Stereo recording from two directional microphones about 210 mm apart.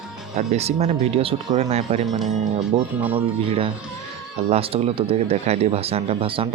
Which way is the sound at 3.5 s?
25° right (ahead or behind).